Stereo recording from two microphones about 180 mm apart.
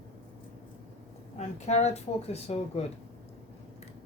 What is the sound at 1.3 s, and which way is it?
Speech, 35° left (ahead or behind).